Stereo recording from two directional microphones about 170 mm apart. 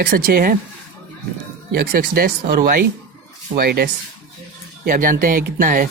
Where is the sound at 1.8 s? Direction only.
60° right (ahead or behind).